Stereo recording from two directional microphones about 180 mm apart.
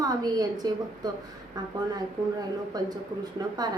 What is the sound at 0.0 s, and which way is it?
Speech, 20° right (ahead or behind).